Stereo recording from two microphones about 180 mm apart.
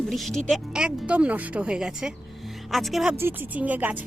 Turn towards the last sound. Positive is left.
turn(degrees=-10)  # may be behind; listen again after turning